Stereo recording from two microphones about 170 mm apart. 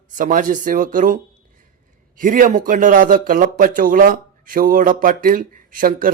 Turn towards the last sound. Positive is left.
turn(degrees=-55)  # may be behind; listen again after turning